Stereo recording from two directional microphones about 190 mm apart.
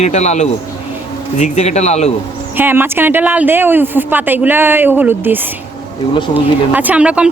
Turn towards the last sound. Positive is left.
turn(degrees=-5)  # may be behind; listen again after turning